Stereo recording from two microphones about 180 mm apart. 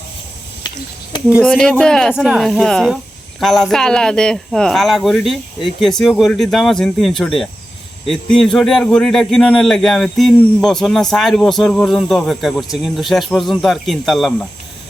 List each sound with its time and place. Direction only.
1.1 s speech: 25° left (ahead or behind)
1.5 s a man's voice: 5° left (ahead or behind)